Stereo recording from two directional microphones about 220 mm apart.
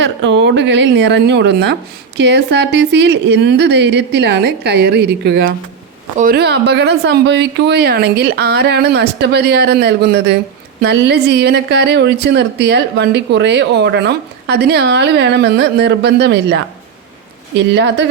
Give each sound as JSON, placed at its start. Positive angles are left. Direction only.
{"t": 0.0, "sound": "speech", "side_deg": -55}
{"t": 17.6, "sound": "speech", "side_deg": -50}